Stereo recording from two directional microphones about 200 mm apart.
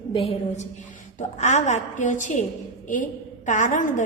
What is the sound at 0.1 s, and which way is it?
A woman's voice, 30° left (ahead or behind).